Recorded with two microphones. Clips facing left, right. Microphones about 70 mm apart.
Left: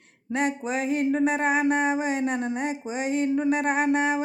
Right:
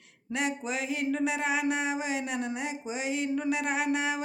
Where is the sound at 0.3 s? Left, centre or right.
Left.